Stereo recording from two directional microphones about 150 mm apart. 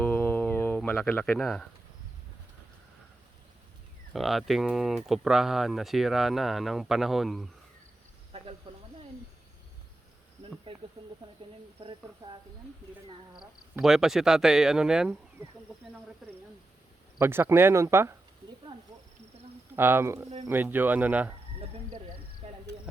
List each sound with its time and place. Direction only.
0.0 s a sound: 10° left (ahead or behind)
4.1 s speech: centre (ahead or behind)
8.7 s snake: 35° right (ahead or behind)
10.7 s snake: 35° right (ahead or behind)
11.8 s speech: 30° right (ahead or behind)
13.4 s speech: 5° right (ahead or behind)
17.2 s speech: 15° right (ahead or behind)
19.7 s speech: 15° right (ahead or behind)
22.4 s cricket: 40° right (ahead or behind)